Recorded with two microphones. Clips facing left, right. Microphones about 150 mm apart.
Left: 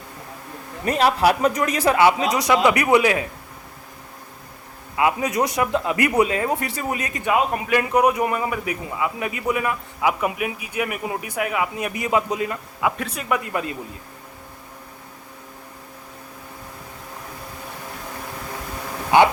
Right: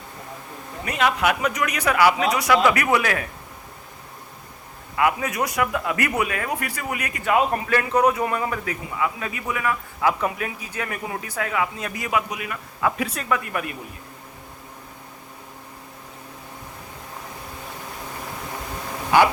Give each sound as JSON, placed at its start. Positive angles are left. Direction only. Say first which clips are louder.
{"t": 0.9, "sound": "speech", "louder": "left 4 dB", "side_deg": 35}
{"t": 4.9, "sound": "a man's voice", "louder": "left 2 dB", "side_deg": 20}
{"t": 12.8, "sound": "a man's voice", "louder": "even", "side_deg": 15}